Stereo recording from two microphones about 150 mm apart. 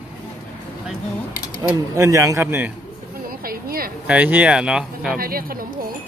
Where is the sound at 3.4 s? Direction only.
75° right (ahead or behind).